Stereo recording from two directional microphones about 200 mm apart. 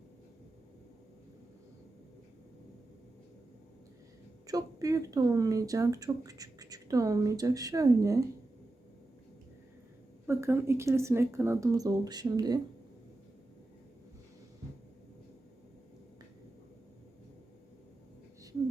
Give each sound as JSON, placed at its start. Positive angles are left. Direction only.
{"t": 4.4, "sound": "speech", "side_deg": -20}
{"t": 10.2, "sound": "speech", "side_deg": -10}